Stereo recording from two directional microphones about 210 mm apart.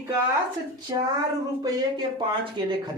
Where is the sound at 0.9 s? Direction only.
20° right (ahead or behind).